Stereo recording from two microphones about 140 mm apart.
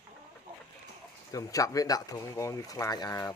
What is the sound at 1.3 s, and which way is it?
Speech, 25° left (ahead or behind).